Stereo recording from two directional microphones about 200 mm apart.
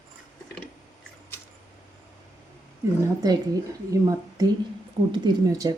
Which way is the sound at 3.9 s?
15° right (ahead or behind).